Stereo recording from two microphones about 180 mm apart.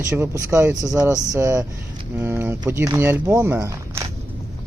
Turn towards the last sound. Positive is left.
turn(degrees=-15)  # may be behind; listen again after turning